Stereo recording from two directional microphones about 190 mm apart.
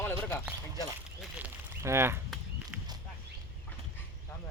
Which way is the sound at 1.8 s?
15° right (ahead or behind).